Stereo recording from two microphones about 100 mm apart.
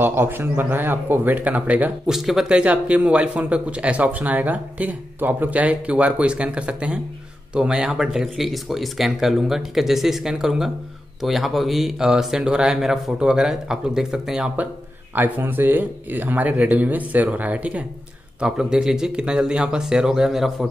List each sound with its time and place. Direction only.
0.0 s speech: 20° right (ahead or behind)
2.1 s speech: 5° right (ahead or behind)
15.1 s speech: 20° right (ahead or behind); by 20.5 s 5° right (ahead or behind)